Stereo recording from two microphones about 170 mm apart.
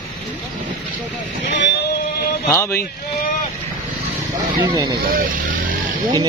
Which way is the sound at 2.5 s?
15° left (ahead or behind).